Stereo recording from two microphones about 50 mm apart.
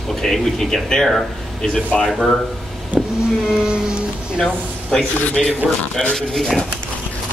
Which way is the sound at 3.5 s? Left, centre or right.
Centre.